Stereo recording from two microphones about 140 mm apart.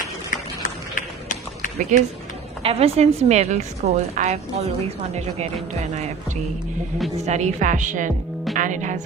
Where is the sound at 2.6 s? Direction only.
45° right (ahead or behind).